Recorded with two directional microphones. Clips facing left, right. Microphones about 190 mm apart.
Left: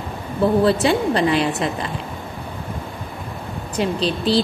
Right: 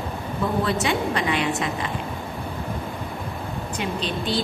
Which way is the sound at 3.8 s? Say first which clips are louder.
Left 7 dB; 35° left (ahead or behind).